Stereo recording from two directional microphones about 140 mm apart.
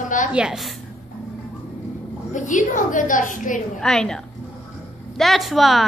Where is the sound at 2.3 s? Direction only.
65° left (ahead or behind).